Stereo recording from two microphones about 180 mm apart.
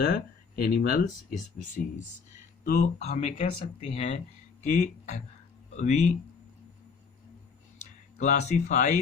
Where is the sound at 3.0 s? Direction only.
35° left (ahead or behind).